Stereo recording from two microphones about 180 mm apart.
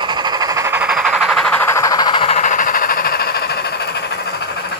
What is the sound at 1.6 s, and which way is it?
Vehicle, 15° left (ahead or behind).